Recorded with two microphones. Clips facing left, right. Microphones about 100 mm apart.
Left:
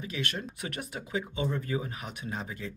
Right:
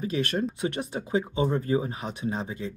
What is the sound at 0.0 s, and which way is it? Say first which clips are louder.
Speech: right 8 dB; 40° right (ahead or behind).